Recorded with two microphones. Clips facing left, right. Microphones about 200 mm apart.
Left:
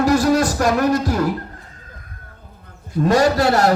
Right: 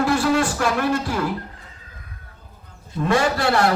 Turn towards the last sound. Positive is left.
turn(degrees=40)  # may be behind; listen again after turning